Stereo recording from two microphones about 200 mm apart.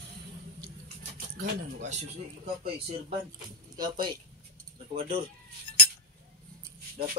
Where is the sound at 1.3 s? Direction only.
40° right (ahead or behind).